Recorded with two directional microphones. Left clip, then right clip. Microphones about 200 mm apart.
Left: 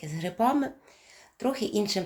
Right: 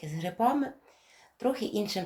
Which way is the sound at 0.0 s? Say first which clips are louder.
Left 1 dB; 15° left (ahead or behind).